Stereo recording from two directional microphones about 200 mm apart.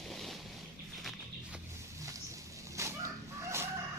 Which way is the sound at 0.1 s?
Centre (ahead or behind).